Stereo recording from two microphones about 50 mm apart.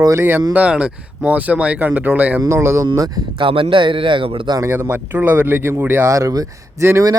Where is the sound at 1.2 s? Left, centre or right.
Right.